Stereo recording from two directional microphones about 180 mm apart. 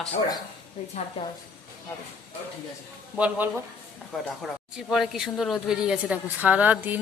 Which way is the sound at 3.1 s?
10° right (ahead or behind).